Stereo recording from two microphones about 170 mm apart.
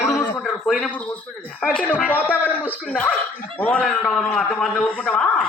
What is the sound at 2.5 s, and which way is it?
A man's voice, 10° left (ahead or behind).